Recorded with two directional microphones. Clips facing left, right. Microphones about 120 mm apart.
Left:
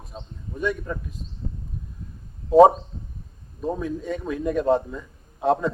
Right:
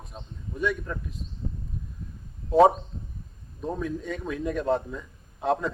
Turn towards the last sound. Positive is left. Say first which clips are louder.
# left 4 dB
turn(degrees=0)  # may be behind; listen again after turning